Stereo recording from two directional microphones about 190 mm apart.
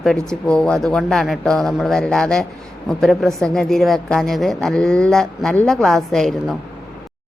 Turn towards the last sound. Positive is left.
turn(degrees=0)  # may be behind; listen again after turning